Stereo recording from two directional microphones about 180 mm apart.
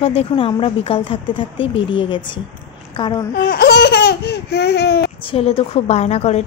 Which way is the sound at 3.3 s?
60° left (ahead or behind).